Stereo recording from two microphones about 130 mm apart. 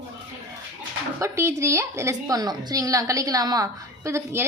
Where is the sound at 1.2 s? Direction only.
20° right (ahead or behind).